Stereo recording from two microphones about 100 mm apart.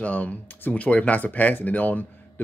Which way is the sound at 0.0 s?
15° left (ahead or behind).